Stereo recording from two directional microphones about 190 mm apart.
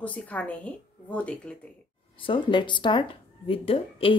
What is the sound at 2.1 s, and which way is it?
Speech, 25° left (ahead or behind).